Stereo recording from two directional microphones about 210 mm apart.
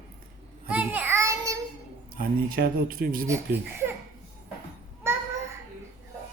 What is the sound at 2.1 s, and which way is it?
Speech, 45° right (ahead or behind).